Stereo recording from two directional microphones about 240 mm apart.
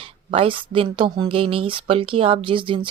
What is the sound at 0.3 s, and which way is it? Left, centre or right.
Speech, right.